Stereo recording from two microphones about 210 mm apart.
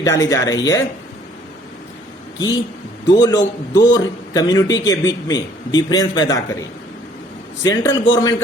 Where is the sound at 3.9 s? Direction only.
15° left (ahead or behind).